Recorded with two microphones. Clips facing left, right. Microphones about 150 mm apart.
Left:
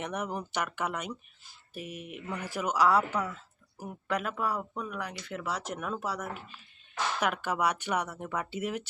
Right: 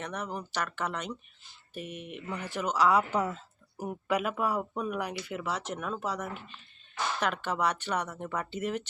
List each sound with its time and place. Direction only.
0.0 s speech: 15° left (ahead or behind)
3.1 s speech: 25° right (ahead or behind)
4.2 s speech: 5° right (ahead or behind)